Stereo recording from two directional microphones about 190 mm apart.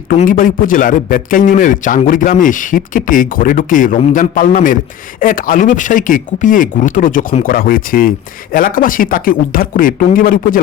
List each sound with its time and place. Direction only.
0.2 s a man's voice: 45° left (ahead or behind)